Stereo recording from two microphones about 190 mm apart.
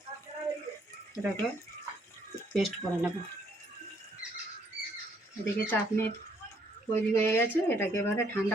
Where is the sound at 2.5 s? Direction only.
Centre (ahead or behind).